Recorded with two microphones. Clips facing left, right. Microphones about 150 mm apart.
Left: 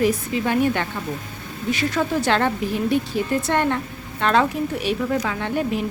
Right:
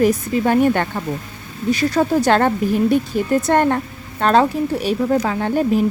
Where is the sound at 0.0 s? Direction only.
45° right (ahead or behind).